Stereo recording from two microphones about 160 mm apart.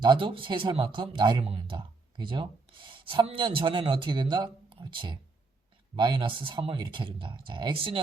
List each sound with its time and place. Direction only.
0.0 s speech: 30° right (ahead or behind)